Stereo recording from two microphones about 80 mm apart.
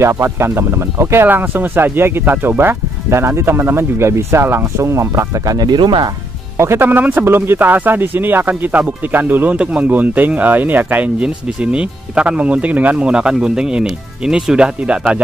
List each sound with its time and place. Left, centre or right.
0.0 s speech: right
6.6 s speech: right; by 15.1 s centre